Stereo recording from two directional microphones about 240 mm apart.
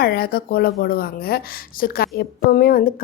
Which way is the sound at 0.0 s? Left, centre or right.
Left.